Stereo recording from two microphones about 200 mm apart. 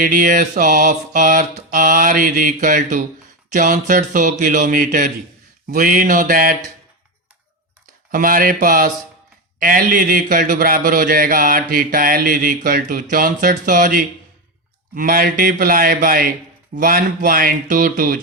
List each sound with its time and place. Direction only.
0.0 s mantra: 40° right (ahead or behind)
3.5 s a man's voice: 40° right (ahead or behind)
5.6 s mantra: 45° right (ahead or behind)
8.1 s mantra: 45° right (ahead or behind)